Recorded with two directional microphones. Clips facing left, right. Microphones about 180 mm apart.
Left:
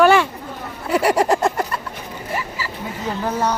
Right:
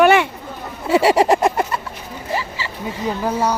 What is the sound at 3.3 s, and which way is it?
Speech, 10° right (ahead or behind).